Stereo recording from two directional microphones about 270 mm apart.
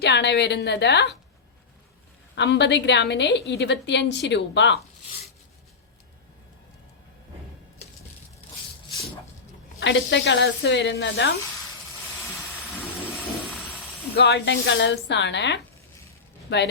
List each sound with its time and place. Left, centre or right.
0.0 s a woman's voice: left
2.3 s a woman's voice: left
9.8 s a woman's voice: left
14.2 s a woman's voice: left